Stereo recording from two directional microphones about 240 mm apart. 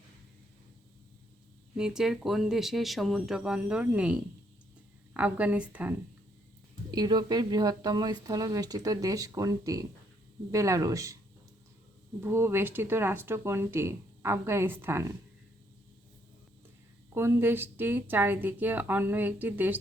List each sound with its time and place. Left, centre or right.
1.7 s speech: centre
6.9 s speech: centre
12.2 s speech: centre
17.2 s speech: centre